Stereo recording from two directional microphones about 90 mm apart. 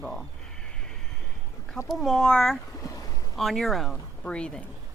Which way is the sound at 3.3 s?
Centre (ahead or behind).